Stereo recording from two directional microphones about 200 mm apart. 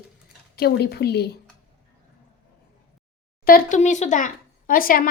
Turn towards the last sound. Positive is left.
turn(degrees=45)  # may be behind; listen again after turning